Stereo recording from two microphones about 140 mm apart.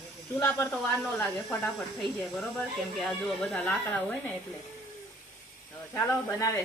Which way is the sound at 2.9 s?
5° left (ahead or behind).